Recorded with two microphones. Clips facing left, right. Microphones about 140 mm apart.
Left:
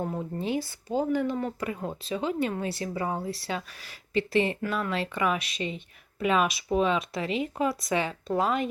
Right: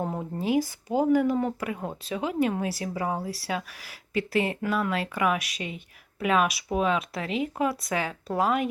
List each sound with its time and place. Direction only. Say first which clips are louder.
0.0 s speech: right 1 dB; 20° right (ahead or behind)
0.3 s speech: right 7 dB; 10° right (ahead or behind)